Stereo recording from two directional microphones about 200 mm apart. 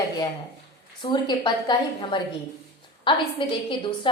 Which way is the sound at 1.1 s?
20° left (ahead or behind).